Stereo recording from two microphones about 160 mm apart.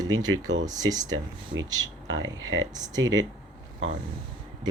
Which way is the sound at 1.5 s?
90° right.